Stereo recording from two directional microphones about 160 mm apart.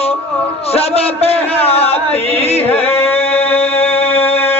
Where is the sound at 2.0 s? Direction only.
40° left (ahead or behind).